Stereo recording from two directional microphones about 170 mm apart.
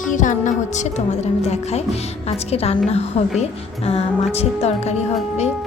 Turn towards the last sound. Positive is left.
turn(degrees=40)  # may be behind; listen again after turning